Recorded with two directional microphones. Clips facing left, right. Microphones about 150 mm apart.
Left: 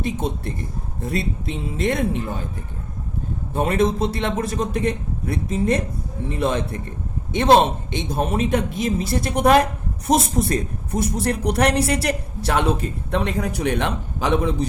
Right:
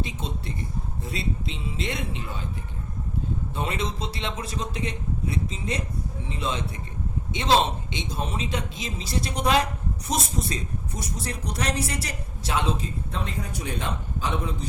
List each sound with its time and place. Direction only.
0.0 s speech: 55° left (ahead or behind)
3.5 s speech: 50° left (ahead or behind); by 14.7 s 80° left